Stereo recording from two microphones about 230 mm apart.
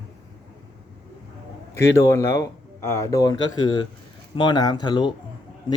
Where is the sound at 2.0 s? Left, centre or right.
Centre.